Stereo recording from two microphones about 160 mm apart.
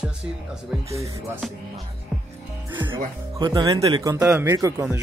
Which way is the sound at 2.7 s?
30° right (ahead or behind).